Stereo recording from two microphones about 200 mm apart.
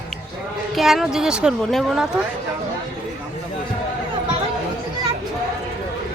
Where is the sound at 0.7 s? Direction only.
Centre (ahead or behind).